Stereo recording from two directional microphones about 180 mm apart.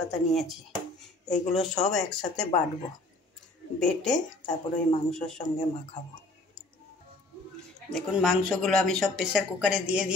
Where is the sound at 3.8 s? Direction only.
5° left (ahead or behind).